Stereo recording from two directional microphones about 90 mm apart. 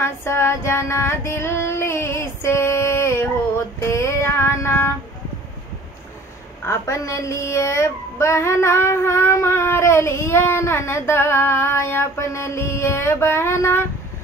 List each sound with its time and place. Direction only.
0.0 s female singing: 30° left (ahead or behind)
6.6 s a woman's voice: 35° left (ahead or behind)